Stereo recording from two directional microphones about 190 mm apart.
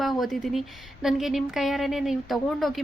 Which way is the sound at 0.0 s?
Centre (ahead or behind).